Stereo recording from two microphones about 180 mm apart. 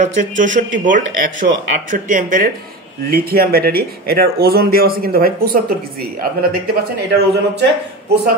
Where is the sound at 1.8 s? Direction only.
45° right (ahead or behind).